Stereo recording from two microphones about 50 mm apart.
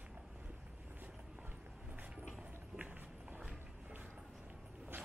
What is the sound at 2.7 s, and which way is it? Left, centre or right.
Clip-clop, right.